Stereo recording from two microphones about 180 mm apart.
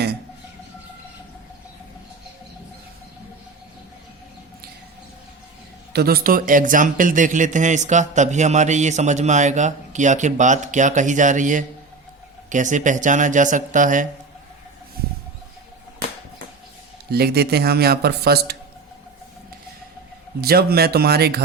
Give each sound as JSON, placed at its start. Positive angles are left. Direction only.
{"t": 5.9, "sound": "speech", "side_deg": -60}
{"t": 17.1, "sound": "speech", "side_deg": -60}
{"t": 20.4, "sound": "speech", "side_deg": -60}